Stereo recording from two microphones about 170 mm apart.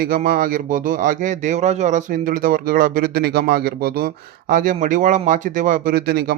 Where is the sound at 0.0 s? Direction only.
55° right (ahead or behind).